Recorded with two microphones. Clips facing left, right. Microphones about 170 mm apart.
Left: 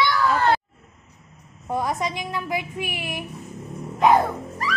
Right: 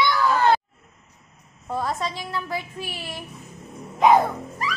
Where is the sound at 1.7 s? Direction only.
15° left (ahead or behind).